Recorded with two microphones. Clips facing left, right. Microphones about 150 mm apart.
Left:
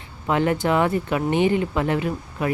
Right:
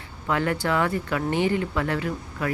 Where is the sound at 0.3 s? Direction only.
20° left (ahead or behind).